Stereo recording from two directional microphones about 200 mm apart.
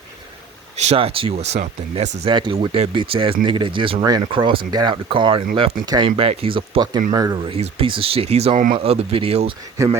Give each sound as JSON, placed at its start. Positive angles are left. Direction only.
{"t": 0.8, "sound": "speech", "side_deg": -30}
{"t": 7.5, "sound": "speech", "side_deg": -30}
{"t": 8.8, "sound": "speech", "side_deg": -30}
{"t": 9.7, "sound": "speech", "side_deg": -15}